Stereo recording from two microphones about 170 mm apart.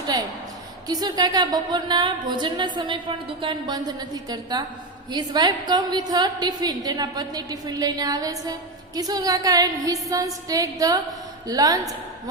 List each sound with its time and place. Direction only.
0.9 s speech: 25° right (ahead or behind)